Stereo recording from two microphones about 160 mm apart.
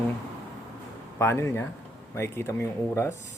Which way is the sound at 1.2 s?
15° left (ahead or behind).